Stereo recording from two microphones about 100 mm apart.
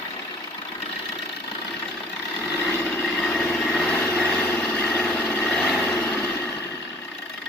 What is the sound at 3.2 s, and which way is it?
Vehicle, 5° left (ahead or behind).